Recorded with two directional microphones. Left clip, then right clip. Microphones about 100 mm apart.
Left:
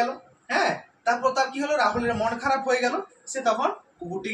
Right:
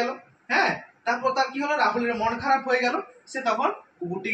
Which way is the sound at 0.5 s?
25° left (ahead or behind).